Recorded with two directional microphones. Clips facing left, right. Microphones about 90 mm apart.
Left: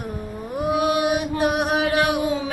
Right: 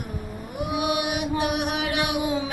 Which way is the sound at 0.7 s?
35° left (ahead or behind).